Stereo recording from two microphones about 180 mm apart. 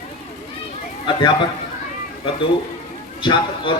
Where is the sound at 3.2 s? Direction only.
25° left (ahead or behind).